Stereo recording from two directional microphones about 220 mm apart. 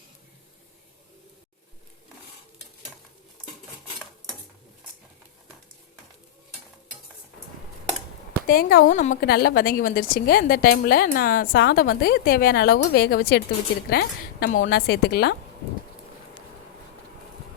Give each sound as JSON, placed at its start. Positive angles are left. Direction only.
{"t": 8.4, "sound": "a woman's voice", "side_deg": 40}